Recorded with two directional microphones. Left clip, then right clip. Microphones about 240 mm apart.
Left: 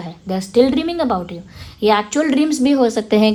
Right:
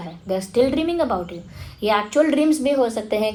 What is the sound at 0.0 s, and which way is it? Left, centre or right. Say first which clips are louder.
A woman's voice: even; left.